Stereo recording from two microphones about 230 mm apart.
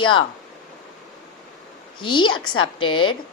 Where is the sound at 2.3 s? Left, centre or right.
Left.